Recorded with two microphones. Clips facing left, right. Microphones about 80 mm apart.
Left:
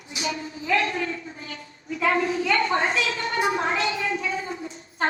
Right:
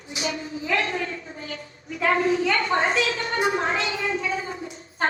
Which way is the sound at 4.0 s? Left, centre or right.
Right.